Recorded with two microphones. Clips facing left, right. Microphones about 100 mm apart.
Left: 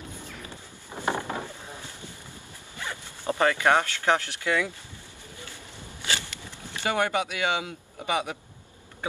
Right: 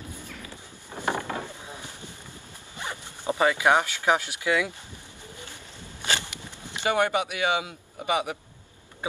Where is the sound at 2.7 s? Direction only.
20° right (ahead or behind).